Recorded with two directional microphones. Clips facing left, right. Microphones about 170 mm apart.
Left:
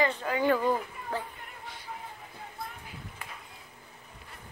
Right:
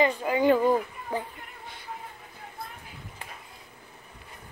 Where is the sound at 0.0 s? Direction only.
15° right (ahead or behind).